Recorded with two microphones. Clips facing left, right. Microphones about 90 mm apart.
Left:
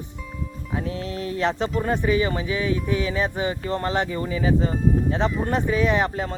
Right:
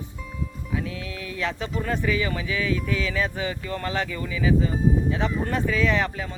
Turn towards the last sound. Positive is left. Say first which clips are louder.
# left 5 dB
turn(degrees=40)  # may be behind; listen again after turning